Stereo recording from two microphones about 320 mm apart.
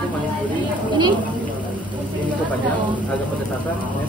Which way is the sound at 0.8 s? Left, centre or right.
Centre.